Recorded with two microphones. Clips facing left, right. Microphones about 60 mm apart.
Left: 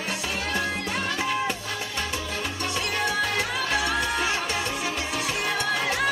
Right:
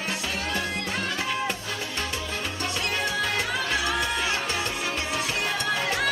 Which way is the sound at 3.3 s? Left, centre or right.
Left.